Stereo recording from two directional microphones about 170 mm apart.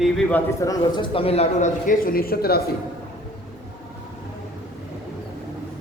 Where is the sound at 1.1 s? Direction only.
35° left (ahead or behind); by 2.6 s 65° left (ahead or behind).